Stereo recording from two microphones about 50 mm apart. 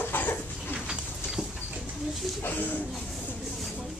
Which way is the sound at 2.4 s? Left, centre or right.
Left.